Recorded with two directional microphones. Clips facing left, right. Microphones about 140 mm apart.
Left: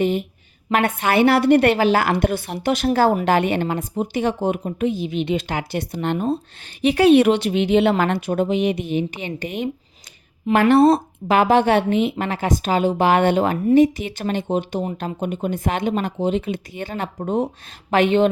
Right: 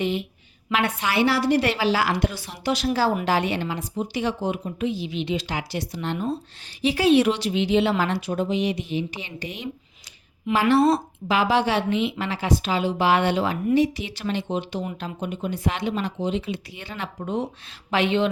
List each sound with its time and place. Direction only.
0.0 s a woman's voice: 45° left (ahead or behind)